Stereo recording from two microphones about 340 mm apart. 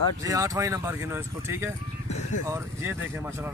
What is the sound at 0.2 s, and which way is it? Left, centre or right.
Speech, centre.